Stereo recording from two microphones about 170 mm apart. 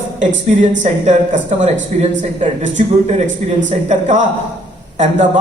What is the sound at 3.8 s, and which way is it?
Speech, 45° right (ahead or behind).